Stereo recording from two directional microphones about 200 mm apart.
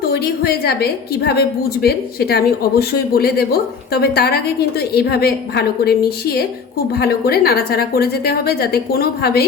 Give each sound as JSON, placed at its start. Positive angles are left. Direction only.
{"t": 0.1, "sound": "a woman's voice", "side_deg": 50}